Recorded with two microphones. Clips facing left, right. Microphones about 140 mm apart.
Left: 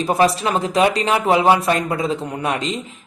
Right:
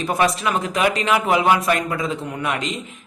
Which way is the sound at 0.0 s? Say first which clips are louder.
Left 3 dB; 30° left (ahead or behind).